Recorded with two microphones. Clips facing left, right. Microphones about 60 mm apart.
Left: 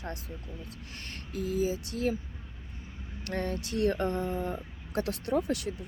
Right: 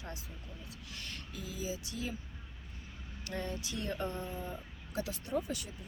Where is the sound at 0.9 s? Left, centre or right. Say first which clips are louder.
Left 8 dB; left.